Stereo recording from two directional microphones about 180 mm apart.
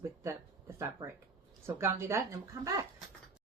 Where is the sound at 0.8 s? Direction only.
15° right (ahead or behind).